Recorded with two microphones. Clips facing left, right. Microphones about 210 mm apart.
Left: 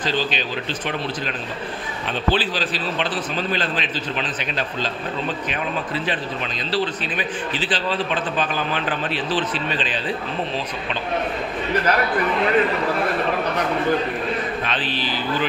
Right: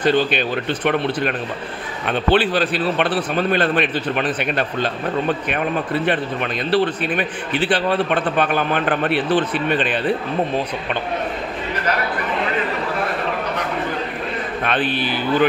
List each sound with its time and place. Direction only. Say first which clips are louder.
0.0 s a man's voice: right 7 dB; 55° right (ahead or behind)
14.6 s a man's voice: right 5 dB; 55° right (ahead or behind)